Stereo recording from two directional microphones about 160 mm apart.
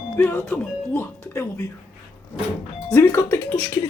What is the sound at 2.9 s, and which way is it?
Speech, 15° left (ahead or behind).